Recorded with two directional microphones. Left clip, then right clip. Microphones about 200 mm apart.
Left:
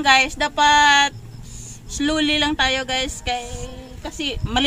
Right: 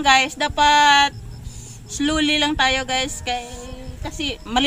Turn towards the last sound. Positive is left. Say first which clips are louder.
# right 1 dB
turn(degrees=0)  # may be behind; listen again after turning